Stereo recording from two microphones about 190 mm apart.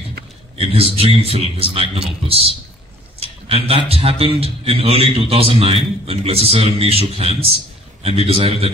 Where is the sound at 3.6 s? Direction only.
30° right (ahead or behind).